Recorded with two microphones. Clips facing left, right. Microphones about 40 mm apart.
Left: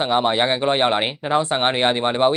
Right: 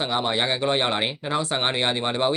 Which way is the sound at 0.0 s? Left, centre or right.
Left.